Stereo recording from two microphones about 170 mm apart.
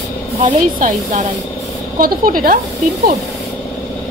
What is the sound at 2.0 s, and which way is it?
Speech, 55° right (ahead or behind).